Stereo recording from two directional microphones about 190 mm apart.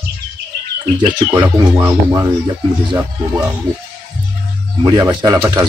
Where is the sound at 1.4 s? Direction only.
10° right (ahead or behind).